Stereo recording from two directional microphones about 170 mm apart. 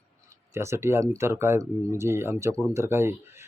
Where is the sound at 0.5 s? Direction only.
15° right (ahead or behind).